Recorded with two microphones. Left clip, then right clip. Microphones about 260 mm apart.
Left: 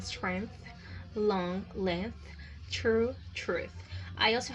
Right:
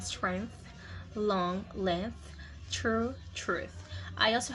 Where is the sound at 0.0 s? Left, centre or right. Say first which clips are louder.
Right 1 dB; centre.